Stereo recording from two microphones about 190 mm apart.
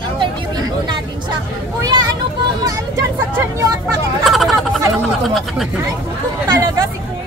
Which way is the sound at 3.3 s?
15° right (ahead or behind).